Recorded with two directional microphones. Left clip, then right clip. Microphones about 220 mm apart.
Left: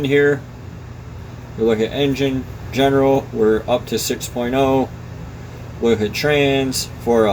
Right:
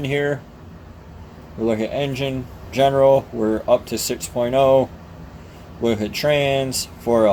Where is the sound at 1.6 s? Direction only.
30° right (ahead or behind).